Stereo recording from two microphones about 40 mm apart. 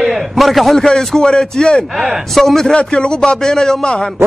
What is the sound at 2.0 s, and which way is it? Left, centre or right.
Speech, centre.